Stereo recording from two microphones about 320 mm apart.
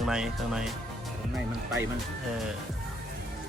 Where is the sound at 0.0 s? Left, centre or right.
Centre.